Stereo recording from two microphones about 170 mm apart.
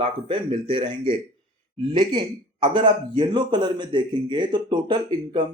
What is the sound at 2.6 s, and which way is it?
A man's voice, 25° right (ahead or behind).